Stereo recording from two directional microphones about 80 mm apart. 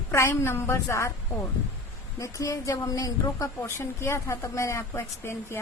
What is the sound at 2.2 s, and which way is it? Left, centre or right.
Speech, left.